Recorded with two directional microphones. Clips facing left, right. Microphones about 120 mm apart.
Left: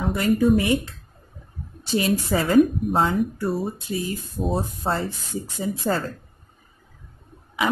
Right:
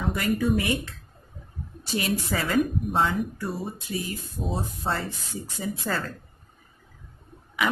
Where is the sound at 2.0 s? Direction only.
30° left (ahead or behind); by 3.7 s 45° left (ahead or behind).